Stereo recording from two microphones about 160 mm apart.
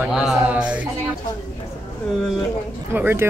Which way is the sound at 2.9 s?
15° right (ahead or behind).